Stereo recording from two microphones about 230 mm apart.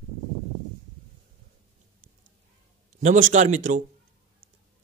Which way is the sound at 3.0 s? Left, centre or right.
Right.